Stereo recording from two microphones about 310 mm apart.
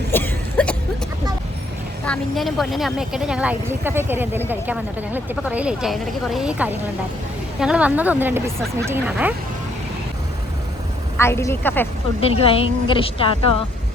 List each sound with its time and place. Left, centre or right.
0.1 s a sound: centre
2.0 s speech: centre
11.2 s a woman's voice: centre
12.2 s a woman's voice: centre